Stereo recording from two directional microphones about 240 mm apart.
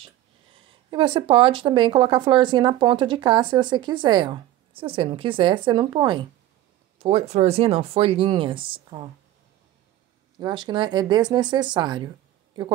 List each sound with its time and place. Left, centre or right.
0.7 s speech: right
10.4 s speech: centre